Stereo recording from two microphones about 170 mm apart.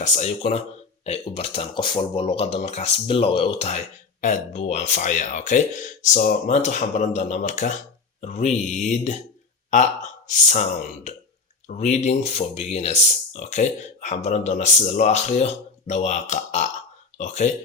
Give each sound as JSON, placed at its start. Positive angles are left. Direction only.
{"t": 0.0, "sound": "speech", "side_deg": 40}
{"t": 6.6, "sound": "speech", "side_deg": 45}